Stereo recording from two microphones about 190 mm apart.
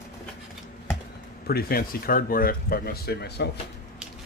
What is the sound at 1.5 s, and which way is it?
Speech, 55° left (ahead or behind).